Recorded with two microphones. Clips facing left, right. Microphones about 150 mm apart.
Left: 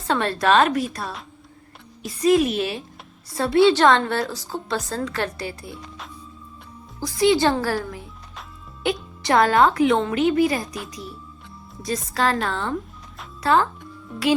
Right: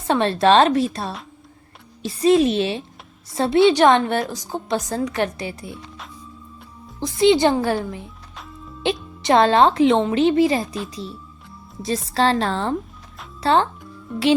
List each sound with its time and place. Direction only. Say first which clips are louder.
0.1 s a woman's voice: right 3 dB; 25° right (ahead or behind)
7.0 s a woman's voice: right 3 dB; 25° right (ahead or behind)
11.8 s a woman's voice: right 3 dB; 25° right (ahead or behind)